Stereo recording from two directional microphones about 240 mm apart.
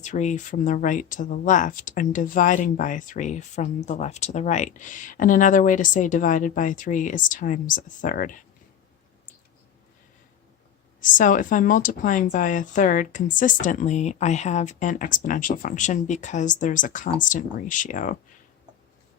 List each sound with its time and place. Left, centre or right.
0.0 s speech: left
11.0 s speech: left